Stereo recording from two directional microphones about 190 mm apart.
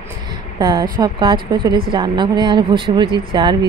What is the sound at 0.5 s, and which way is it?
Speech, 20° right (ahead or behind).